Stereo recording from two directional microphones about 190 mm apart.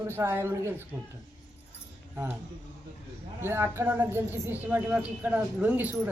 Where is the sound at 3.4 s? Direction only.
10° right (ahead or behind).